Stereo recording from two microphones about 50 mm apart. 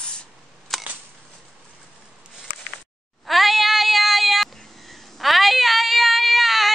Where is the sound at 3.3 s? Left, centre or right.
Centre.